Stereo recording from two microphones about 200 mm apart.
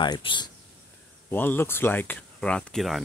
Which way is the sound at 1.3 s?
10° left (ahead or behind).